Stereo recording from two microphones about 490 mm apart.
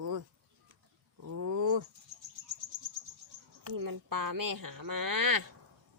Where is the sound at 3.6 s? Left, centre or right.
Right.